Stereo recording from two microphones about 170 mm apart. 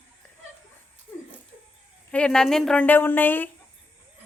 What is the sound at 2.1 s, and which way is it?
Speech, 5° left (ahead or behind).